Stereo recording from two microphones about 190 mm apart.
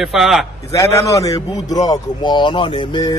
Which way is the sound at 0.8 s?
15° left (ahead or behind).